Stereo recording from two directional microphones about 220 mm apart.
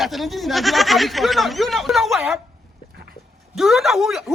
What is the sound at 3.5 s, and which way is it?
Speech, centre (ahead or behind).